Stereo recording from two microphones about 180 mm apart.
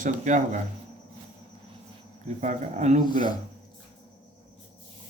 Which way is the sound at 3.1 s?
25° left (ahead or behind).